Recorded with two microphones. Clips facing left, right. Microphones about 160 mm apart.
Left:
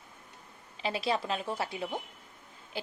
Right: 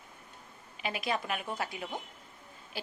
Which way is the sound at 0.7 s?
30° left (ahead or behind).